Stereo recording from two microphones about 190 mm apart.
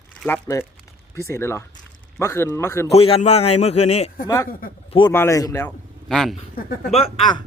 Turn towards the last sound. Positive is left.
turn(degrees=30)  # may be behind; listen again after turning